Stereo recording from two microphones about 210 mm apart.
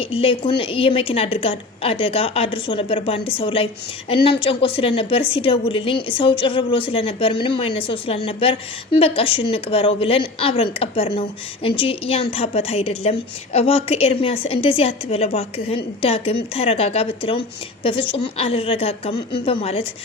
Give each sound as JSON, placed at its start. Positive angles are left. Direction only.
{"t": 0.0, "sound": "a woman's voice", "side_deg": 25}